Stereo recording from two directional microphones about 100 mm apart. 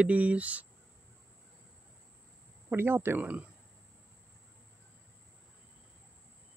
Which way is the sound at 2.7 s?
25° right (ahead or behind).